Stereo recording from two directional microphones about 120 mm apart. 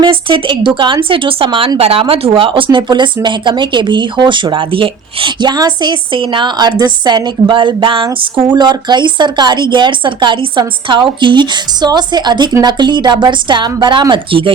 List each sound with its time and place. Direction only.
0.0 s speech: 45° right (ahead or behind)